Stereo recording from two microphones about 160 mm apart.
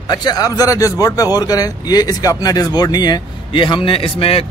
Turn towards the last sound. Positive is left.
turn(degrees=35)  # may be behind; listen again after turning